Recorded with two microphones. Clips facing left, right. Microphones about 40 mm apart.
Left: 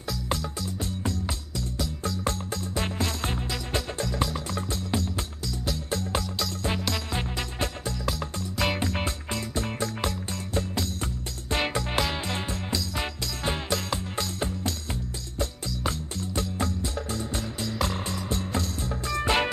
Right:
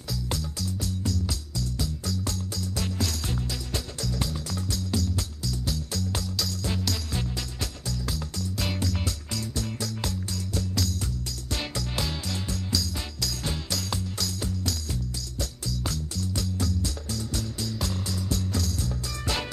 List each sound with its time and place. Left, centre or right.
0.6 s music: left
8.7 s music: left